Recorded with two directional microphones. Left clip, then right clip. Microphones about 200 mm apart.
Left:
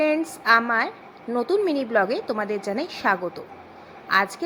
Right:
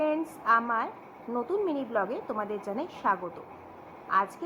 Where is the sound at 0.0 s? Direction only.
25° left (ahead or behind).